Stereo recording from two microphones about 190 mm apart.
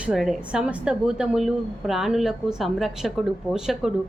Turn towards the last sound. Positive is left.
turn(degrees=-5)  # may be behind; listen again after turning